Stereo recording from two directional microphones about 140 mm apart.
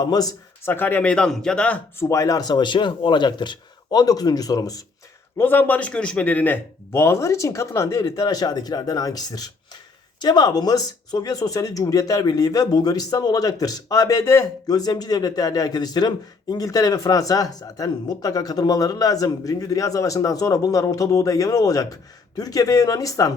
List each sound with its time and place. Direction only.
0.0 s speech: 25° left (ahead or behind)
0.7 s speech: 15° left (ahead or behind)
5.4 s speech: 15° left (ahead or behind)